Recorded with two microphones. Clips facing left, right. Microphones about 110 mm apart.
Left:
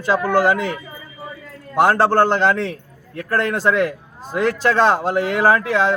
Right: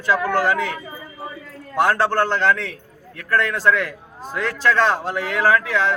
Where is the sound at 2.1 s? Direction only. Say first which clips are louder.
Left 3 dB; 20° left (ahead or behind).